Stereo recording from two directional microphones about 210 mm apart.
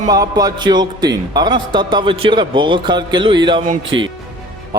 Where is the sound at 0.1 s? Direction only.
20° right (ahead or behind).